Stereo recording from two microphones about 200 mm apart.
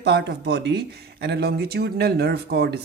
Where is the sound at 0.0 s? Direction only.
55° right (ahead or behind).